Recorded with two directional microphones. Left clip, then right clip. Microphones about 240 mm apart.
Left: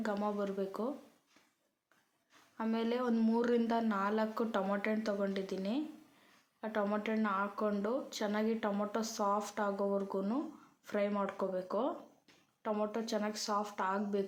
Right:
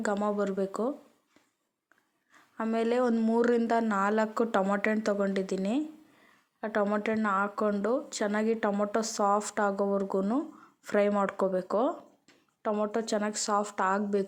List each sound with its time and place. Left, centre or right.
0.0 s speech: right
2.6 s speech: right